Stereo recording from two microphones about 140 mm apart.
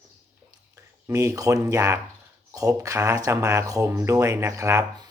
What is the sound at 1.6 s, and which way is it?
Speech, 20° right (ahead or behind).